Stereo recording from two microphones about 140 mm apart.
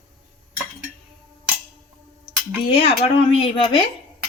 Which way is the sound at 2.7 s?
40° left (ahead or behind).